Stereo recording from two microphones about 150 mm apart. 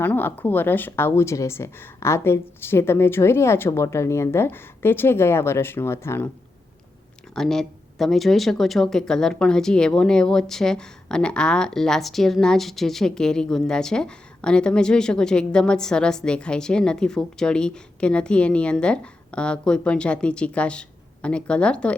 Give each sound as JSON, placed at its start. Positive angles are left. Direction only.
{"t": 0.0, "sound": "speech", "side_deg": 15}
{"t": 7.3, "sound": "speech", "side_deg": 5}